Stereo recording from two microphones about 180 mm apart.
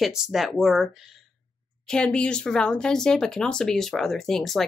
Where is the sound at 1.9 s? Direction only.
5° left (ahead or behind).